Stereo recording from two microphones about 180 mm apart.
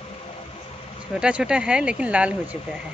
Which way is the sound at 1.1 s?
5° right (ahead or behind).